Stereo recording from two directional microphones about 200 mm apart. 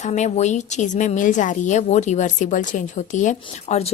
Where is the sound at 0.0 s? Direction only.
35° left (ahead or behind).